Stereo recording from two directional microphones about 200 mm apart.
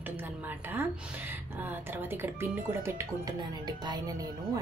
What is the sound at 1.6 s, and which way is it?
Speech, 10° right (ahead or behind).